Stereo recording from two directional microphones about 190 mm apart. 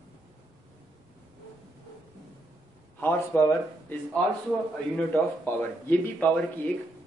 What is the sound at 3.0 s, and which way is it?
Speech, 10° left (ahead or behind).